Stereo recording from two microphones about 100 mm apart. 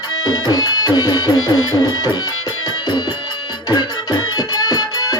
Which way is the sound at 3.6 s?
45° left (ahead or behind).